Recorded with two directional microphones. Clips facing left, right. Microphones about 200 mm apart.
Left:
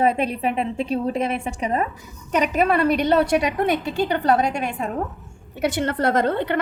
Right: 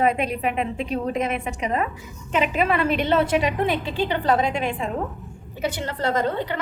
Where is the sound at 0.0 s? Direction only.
30° left (ahead or behind).